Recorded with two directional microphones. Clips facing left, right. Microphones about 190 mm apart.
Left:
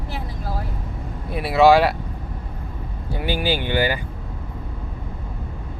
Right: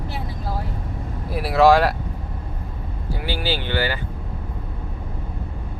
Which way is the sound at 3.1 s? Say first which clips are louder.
Left 3 dB; 15° left (ahead or behind).